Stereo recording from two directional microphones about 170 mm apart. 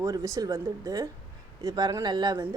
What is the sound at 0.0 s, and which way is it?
Speech, 20° right (ahead or behind).